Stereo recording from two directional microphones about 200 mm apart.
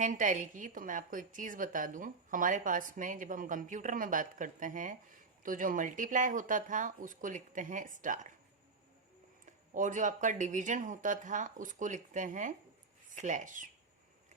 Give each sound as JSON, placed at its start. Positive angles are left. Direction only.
{"t": 0.0, "sound": "a woman's voice", "side_deg": -40}
{"t": 9.5, "sound": "a woman's voice", "side_deg": -40}